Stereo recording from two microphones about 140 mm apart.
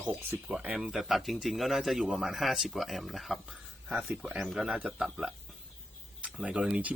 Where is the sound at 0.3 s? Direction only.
10° right (ahead or behind).